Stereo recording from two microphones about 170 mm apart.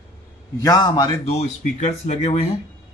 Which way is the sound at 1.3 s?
40° left (ahead or behind).